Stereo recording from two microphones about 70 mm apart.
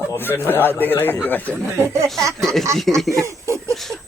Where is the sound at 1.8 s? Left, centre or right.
Right.